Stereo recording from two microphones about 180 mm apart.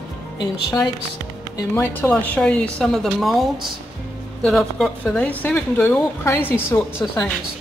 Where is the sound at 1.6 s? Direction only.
10° left (ahead or behind).